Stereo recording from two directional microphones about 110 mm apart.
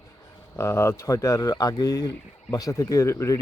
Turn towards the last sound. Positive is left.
turn(degrees=25)  # may be behind; listen again after turning